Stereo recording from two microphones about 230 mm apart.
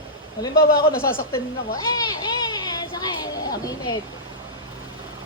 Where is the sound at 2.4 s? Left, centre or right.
Centre.